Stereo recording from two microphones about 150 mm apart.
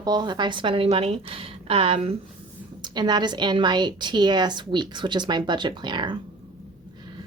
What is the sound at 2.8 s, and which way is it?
A woman's voice, 30° right (ahead or behind).